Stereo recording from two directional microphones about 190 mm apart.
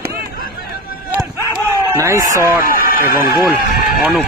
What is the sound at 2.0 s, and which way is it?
Speech, 15° right (ahead or behind).